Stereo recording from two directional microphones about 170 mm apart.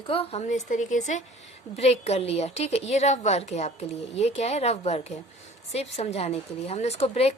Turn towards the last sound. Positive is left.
turn(degrees=40)  # may be behind; listen again after turning